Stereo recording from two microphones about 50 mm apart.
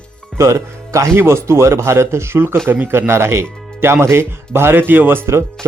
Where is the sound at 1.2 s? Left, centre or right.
Right.